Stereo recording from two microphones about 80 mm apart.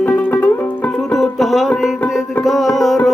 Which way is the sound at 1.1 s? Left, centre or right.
Centre.